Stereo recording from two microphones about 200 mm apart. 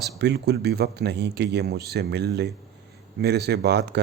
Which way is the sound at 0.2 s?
55° right (ahead or behind).